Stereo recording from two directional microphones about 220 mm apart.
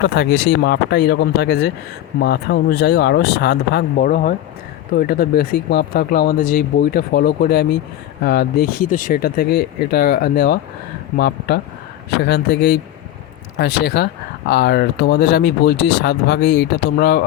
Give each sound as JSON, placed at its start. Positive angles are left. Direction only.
{"t": 0.0, "sound": "speech", "side_deg": 50}